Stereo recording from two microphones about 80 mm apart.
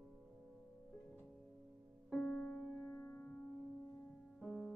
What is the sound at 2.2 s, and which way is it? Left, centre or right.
Music, left.